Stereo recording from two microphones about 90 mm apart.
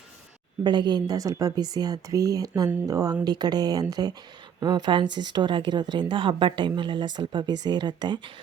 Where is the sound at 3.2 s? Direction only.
50° right (ahead or behind).